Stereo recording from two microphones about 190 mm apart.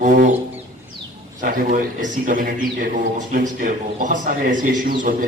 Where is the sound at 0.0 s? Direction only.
45° right (ahead or behind).